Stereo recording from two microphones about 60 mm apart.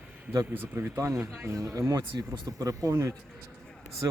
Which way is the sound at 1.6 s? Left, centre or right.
Right.